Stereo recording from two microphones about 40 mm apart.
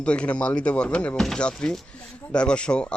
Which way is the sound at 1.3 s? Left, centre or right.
Left.